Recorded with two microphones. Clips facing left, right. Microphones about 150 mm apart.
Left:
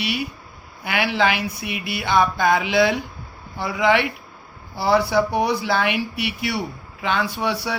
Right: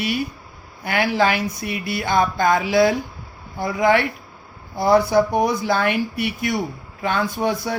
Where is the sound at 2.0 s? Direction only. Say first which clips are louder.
Even; 50° right (ahead or behind).